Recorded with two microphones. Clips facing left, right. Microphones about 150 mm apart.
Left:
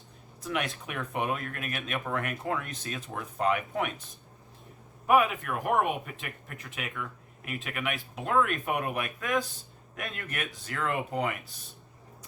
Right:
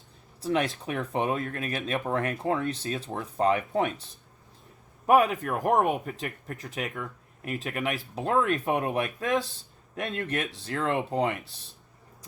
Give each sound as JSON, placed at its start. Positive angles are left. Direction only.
{"t": 0.4, "sound": "speech", "side_deg": -30}